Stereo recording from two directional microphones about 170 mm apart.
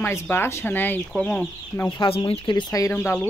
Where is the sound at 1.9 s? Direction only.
30° left (ahead or behind).